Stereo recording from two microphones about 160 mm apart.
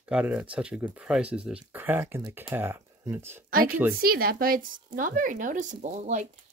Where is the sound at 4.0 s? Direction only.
70° right (ahead or behind); by 6.2 s 45° right (ahead or behind).